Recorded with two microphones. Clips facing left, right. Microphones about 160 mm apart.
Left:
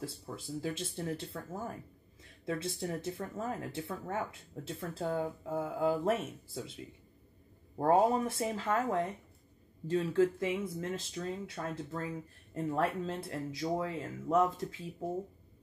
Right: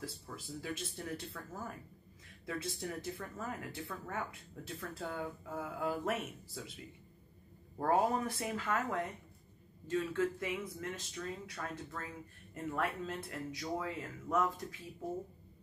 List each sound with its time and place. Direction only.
0.6 s speech: 30° left (ahead or behind)
7.7 s speech: 25° left (ahead or behind)